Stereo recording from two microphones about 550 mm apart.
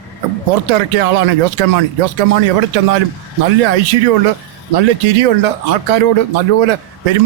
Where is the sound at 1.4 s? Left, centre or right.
Right.